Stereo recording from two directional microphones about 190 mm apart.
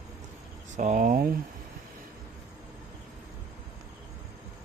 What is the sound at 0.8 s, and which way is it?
Speech, 40° right (ahead or behind).